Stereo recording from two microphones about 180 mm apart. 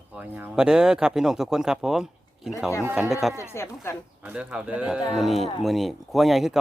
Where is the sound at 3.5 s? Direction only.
15° left (ahead or behind).